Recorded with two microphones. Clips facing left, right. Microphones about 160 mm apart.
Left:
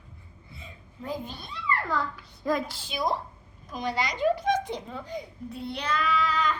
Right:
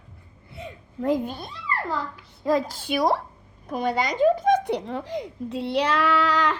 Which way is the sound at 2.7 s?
65° right (ahead or behind).